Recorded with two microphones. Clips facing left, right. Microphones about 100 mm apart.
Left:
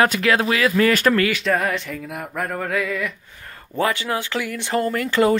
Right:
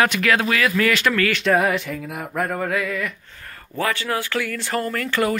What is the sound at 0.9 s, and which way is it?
Speech, 40° left (ahead or behind).